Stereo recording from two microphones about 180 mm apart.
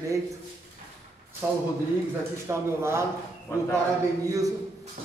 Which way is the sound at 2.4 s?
15° right (ahead or behind).